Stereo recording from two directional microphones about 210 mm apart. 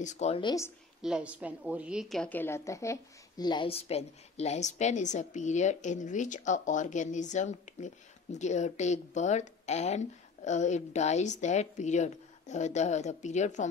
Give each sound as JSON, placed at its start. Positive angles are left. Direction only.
{"t": 0.0, "sound": "speech", "side_deg": 35}
{"t": 1.0, "sound": "a woman's voice", "side_deg": -5}